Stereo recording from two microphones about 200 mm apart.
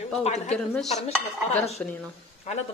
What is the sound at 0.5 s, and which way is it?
A woman's voice, centre (ahead or behind).